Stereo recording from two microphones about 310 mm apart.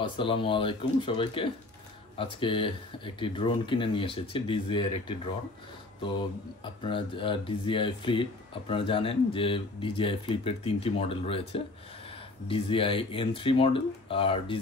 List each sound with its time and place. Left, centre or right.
0.0 s speech: centre
6.6 s speech: centre